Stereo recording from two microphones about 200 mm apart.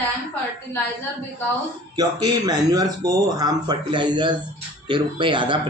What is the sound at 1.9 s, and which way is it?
Speech, 20° right (ahead or behind).